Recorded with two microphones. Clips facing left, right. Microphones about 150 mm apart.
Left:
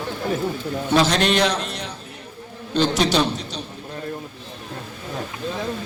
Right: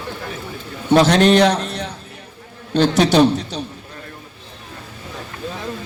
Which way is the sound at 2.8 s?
60° right (ahead or behind).